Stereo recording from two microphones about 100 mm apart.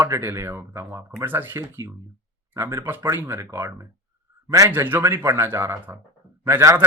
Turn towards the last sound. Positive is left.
turn(degrees=-30)  # may be behind; listen again after turning